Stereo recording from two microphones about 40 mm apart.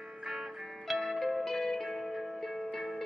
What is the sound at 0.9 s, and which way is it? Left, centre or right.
Music, centre.